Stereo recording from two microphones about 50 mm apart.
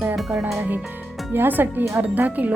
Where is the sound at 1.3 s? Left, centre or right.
Right.